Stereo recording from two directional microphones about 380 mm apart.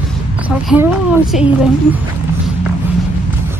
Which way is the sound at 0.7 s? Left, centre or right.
Centre.